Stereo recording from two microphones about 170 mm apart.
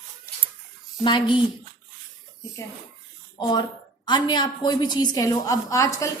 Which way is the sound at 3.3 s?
25° left (ahead or behind).